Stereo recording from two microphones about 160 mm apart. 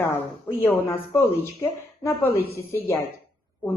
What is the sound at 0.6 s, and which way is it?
A woman's voice, 15° left (ahead or behind).